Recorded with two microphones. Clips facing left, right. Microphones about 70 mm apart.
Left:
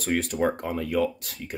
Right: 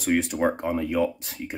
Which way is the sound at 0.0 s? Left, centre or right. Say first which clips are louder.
Right 2 dB; centre.